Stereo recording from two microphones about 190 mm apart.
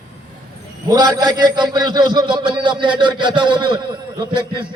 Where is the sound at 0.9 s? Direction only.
20° right (ahead or behind).